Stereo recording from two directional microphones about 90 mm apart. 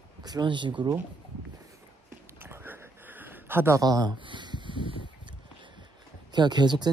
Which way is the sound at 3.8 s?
45° right (ahead or behind).